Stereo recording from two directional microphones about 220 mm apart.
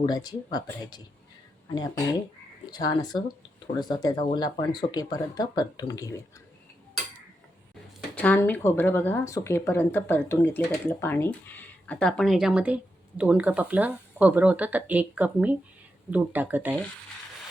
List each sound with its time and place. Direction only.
0.0 s speech: 15° left (ahead or behind)
8.1 s speech: 5° left (ahead or behind); by 16.7 s 10° right (ahead or behind)